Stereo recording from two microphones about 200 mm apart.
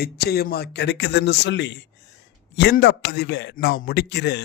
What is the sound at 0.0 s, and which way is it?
A man's voice, 50° left (ahead or behind).